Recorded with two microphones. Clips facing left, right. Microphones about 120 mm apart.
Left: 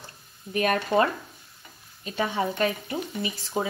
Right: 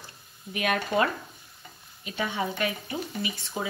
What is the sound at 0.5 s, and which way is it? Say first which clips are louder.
Speech: left 4 dB; 40° left (ahead or behind).